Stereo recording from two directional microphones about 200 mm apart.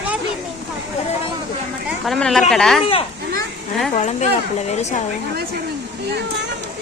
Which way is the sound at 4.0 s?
35° left (ahead or behind).